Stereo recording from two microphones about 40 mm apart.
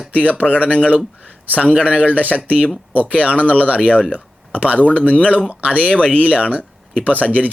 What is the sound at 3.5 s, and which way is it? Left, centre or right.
Speech, right.